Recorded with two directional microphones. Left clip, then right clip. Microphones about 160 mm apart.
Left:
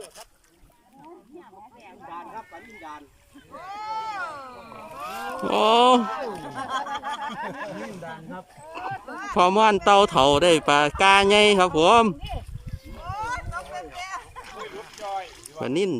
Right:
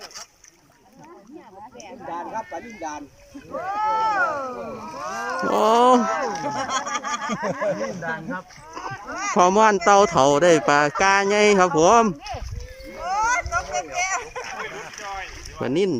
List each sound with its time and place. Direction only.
2.0 s a sound: 65° right (ahead or behind)
3.5 s speech: 75° right (ahead or behind)
5.4 s speech: 5° left (ahead or behind)
6.6 s a sound: 45° right (ahead or behind)
7.3 s speech: 60° left (ahead or behind)
8.0 s speech: 20° left (ahead or behind)
9.3 s speech: 10° left (ahead or behind)
13.1 s vehicle: 45° right (ahead or behind)
15.6 s speech: 5° left (ahead or behind)